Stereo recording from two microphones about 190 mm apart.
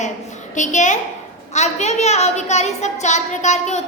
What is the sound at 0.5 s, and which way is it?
A woman's voice, 40° left (ahead or behind).